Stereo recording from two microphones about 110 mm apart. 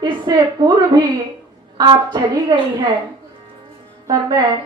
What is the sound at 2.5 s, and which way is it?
Speech, 35° right (ahead or behind).